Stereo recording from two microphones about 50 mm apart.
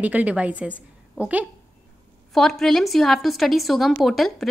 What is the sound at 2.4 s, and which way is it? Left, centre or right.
A woman's voice, centre.